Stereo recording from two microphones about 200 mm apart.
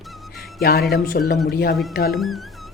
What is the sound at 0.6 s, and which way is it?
Speech, 50° left (ahead or behind).